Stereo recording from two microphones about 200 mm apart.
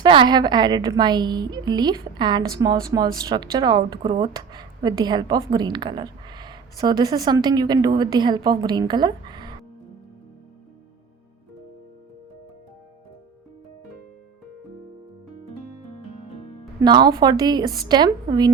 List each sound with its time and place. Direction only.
0.0 s speech: 25° right (ahead or behind)
16.8 s speech: 20° right (ahead or behind)